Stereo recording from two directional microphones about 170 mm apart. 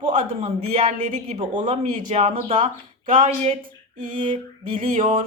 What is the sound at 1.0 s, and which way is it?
Speech, 45° right (ahead or behind).